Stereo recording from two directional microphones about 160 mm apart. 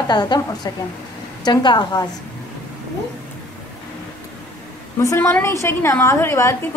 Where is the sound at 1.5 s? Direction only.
25° left (ahead or behind).